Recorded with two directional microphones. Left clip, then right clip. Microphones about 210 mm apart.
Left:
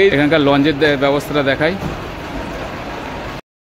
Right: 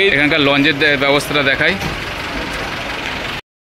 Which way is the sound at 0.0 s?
10° left (ahead or behind).